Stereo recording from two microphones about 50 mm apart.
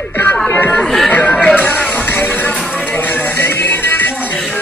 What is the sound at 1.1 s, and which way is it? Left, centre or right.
Music, left.